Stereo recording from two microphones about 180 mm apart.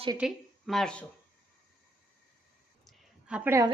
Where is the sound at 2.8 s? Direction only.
5° right (ahead or behind).